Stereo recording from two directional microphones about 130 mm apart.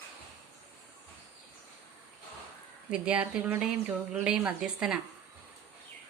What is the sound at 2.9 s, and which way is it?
Speech, 10° right (ahead or behind).